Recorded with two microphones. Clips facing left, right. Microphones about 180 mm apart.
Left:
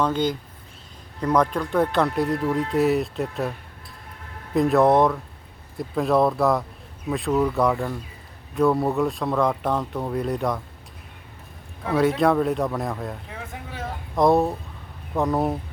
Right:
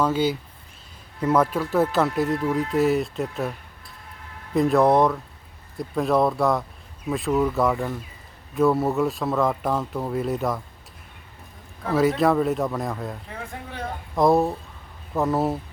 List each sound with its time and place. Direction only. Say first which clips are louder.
0.0 s a man's voice: right 1 dB; 5° right (ahead or behind)
4.5 s a man's voice: left 1 dB; centre (ahead or behind)
11.8 s a man's voice: even; centre (ahead or behind)